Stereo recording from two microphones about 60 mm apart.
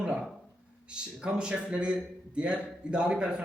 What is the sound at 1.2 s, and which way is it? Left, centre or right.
A man's voice, centre.